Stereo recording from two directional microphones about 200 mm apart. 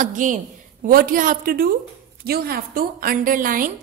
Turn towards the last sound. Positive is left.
turn(degrees=-45)  # may be behind; listen again after turning